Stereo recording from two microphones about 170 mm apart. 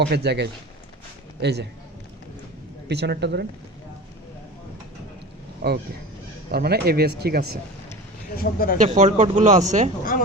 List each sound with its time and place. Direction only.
0.0 s a man's voice: 80° right
2.9 s speech: 80° right
5.6 s speech: 65° right (ahead or behind)
8.4 s speech: 60° left (ahead or behind)
8.8 s speech: 45° right (ahead or behind)
10.1 s a child's voice: 55° left (ahead or behind)